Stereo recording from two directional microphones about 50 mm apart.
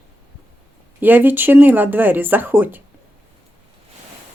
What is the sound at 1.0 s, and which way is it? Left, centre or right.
Speech, right.